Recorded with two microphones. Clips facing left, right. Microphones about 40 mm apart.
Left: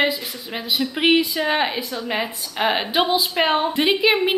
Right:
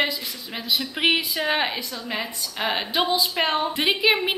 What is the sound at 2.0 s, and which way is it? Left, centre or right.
A woman's voice, left.